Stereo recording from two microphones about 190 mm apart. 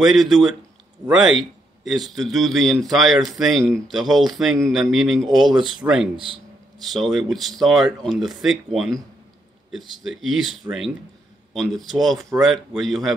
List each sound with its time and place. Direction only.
0.1 s speech: centre (ahead or behind)
6.1 s speech: 25° right (ahead or behind)
6.8 s speech: centre (ahead or behind)